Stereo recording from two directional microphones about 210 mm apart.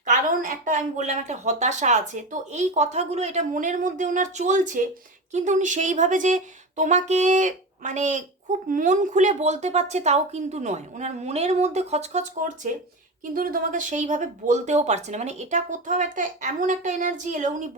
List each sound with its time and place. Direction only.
0.0 s a woman's voice: 40° right (ahead or behind)